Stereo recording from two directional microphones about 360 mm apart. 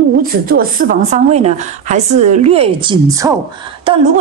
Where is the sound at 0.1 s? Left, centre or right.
Right.